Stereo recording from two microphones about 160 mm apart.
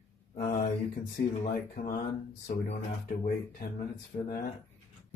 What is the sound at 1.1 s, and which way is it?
Speech, 60° left (ahead or behind).